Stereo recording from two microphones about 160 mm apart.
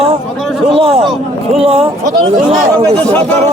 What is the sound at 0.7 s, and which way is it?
Speech, 35° right (ahead or behind).